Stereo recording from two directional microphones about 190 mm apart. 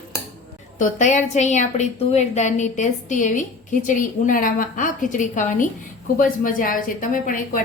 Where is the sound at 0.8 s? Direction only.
40° left (ahead or behind).